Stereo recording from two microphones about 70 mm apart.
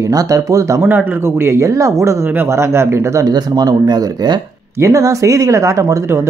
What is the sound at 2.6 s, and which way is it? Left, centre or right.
Speech, right.